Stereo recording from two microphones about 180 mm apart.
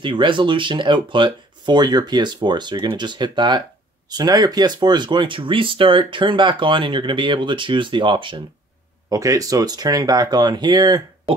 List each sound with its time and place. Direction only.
0.0 s speech: 25° right (ahead or behind)